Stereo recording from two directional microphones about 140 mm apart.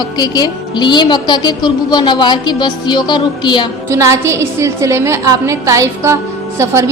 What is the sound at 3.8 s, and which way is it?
A woman's voice, 20° right (ahead or behind).